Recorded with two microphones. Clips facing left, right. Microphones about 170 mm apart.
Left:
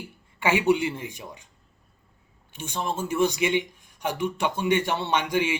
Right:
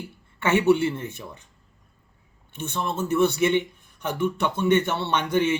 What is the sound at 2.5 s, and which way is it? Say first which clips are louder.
Speech: right 1 dB; 10° left (ahead or behind).